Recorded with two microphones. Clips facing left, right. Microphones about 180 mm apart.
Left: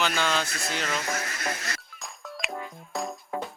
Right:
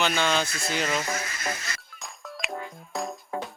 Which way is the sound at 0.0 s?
Centre (ahead or behind).